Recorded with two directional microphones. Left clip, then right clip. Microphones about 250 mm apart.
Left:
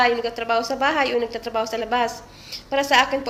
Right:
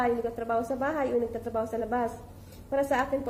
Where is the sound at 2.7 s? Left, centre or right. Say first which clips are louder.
Left 9 dB; left.